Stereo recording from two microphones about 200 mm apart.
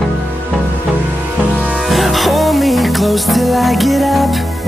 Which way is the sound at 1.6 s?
Centre (ahead or behind).